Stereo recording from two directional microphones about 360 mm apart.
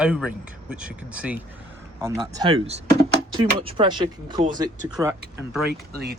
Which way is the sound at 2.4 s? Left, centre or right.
Centre.